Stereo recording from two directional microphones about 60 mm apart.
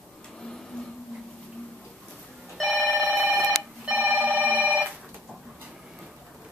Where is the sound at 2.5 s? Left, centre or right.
Centre.